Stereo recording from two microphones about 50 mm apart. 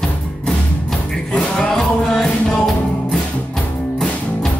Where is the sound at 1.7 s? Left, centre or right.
Centre.